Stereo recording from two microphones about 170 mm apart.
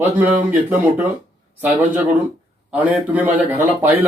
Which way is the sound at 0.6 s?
10° right (ahead or behind).